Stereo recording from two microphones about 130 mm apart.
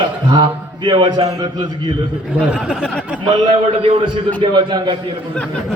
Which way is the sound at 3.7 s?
45° right (ahead or behind).